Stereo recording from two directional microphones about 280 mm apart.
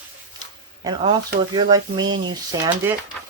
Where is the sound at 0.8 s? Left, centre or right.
Centre.